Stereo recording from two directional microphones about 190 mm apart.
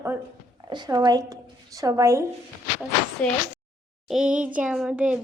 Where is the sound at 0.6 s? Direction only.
20° right (ahead or behind).